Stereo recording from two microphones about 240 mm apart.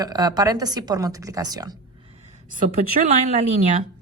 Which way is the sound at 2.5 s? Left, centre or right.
Right.